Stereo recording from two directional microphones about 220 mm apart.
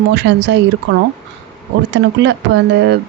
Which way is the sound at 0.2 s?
50° right (ahead or behind).